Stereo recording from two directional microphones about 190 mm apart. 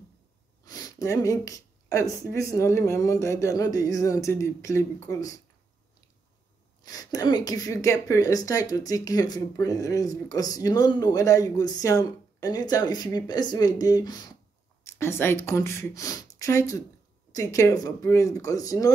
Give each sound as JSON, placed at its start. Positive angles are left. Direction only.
{"t": 0.7, "sound": "a sound", "side_deg": 20}
{"t": 2.3, "sound": "speech", "side_deg": 15}
{"t": 6.8, "sound": "speech", "side_deg": 20}